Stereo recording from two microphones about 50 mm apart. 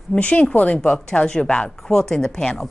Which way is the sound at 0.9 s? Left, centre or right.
Centre.